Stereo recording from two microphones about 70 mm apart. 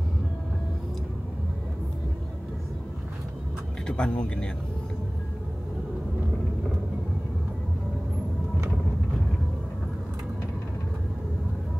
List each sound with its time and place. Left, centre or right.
3.8 s speech: centre